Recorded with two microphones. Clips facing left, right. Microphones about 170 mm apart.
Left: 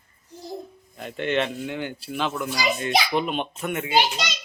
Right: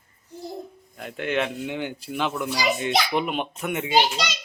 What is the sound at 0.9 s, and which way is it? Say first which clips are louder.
Speech: left 1 dB; 5° right (ahead or behind).